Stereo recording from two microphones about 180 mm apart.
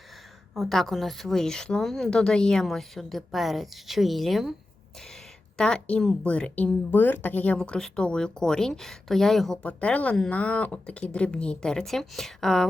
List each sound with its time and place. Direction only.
0.5 s a woman's voice: centre (ahead or behind)